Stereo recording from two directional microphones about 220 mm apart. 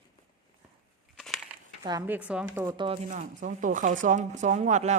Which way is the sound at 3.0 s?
35° right (ahead or behind).